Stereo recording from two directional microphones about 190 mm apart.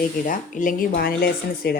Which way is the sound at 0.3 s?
45° left (ahead or behind).